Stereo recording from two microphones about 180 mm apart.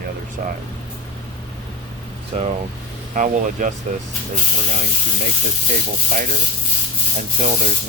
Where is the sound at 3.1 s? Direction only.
45° right (ahead or behind).